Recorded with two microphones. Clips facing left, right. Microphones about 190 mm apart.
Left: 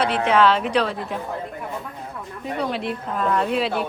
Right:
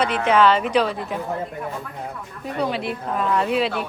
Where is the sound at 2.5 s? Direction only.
Centre (ahead or behind).